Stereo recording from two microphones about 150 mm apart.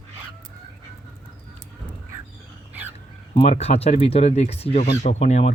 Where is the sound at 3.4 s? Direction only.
45° left (ahead or behind).